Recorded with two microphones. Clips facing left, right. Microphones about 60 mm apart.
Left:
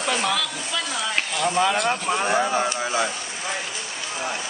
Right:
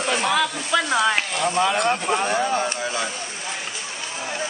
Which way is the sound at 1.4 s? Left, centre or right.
Centre.